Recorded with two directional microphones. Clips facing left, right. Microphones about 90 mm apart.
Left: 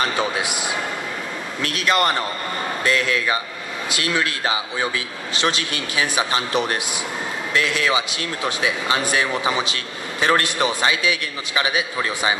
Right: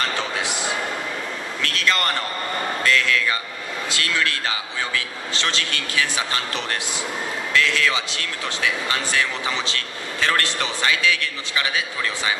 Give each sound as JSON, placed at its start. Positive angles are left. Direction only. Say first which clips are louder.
{"t": 0.0, "sound": "a man's voice", "louder": "left 3 dB", "side_deg": 15}